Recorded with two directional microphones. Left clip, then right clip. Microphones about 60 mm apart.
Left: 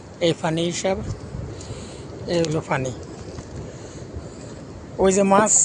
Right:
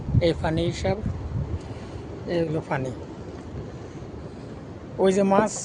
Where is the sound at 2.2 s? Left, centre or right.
Left.